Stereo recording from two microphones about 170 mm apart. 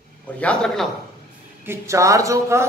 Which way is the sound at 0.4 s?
5° left (ahead or behind).